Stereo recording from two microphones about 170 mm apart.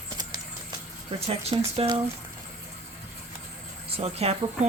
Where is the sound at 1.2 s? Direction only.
35° right (ahead or behind).